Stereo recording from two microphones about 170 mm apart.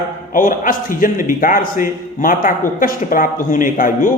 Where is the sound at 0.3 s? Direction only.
50° left (ahead or behind).